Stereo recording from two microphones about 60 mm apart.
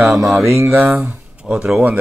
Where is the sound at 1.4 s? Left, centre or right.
Right.